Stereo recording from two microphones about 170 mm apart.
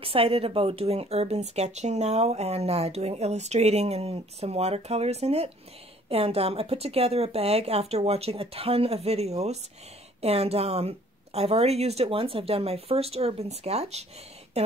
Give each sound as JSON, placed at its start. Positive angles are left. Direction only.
{"t": 0.0, "sound": "speech", "side_deg": -35}